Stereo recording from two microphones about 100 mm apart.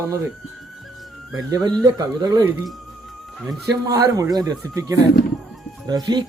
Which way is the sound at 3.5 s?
35° right (ahead or behind).